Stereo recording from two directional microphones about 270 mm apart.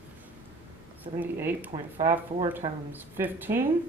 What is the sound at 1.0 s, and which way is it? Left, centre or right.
Speech, centre.